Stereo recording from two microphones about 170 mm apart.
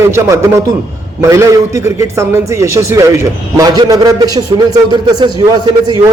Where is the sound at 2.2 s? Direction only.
20° right (ahead or behind).